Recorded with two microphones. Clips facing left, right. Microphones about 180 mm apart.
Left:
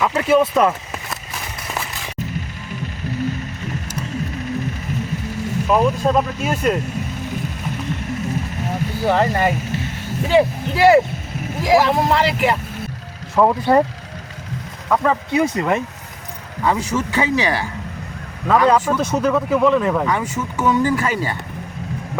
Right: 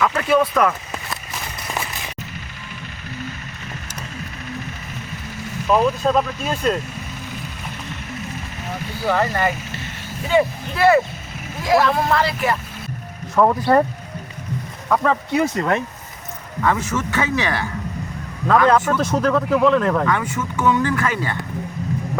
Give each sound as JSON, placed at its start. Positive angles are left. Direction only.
{"t": 0.0, "sound": "speech", "side_deg": 20}
{"t": 5.6, "sound": "speech", "side_deg": 10}
{"t": 9.0, "sound": "speech", "side_deg": 25}
{"t": 11.6, "sound": "speech", "side_deg": 15}
{"t": 14.8, "sound": "speech", "side_deg": 5}